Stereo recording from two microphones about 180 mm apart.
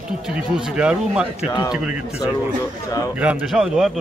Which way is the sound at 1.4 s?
20° left (ahead or behind).